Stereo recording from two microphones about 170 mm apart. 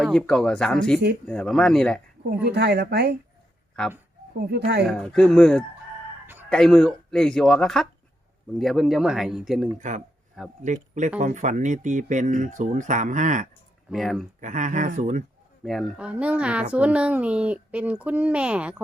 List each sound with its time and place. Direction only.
0.0 s speech: 5° left (ahead or behind)
2.5 s speech: 75° right (ahead or behind)
3.8 s speech: 5° left (ahead or behind)
4.4 s speech: 70° right (ahead or behind)
4.9 s speech: 5° left (ahead or behind)
10.6 s speech: 45° right (ahead or behind)
13.9 s speech: centre (ahead or behind)
14.4 s speech: 45° right (ahead or behind)
15.6 s speech: centre (ahead or behind)